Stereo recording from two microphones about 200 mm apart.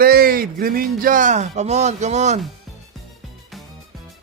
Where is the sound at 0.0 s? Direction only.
50° right (ahead or behind).